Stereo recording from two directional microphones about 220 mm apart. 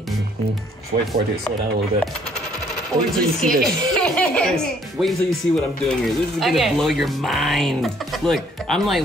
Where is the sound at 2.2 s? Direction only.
5° left (ahead or behind).